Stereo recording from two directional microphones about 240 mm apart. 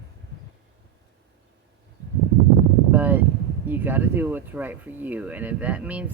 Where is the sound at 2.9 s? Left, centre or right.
Centre.